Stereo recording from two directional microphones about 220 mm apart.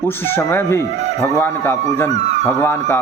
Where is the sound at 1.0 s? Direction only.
30° right (ahead or behind).